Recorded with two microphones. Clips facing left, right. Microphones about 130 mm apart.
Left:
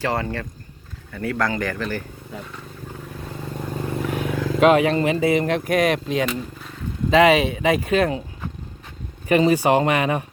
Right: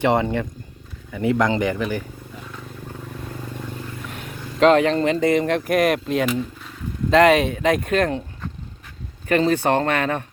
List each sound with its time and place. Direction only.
0.0 s speech: 20° right (ahead or behind)
3.8 s vehicle: 60° left (ahead or behind); by 4.4 s 85° left
4.6 s speech: 5° left (ahead or behind)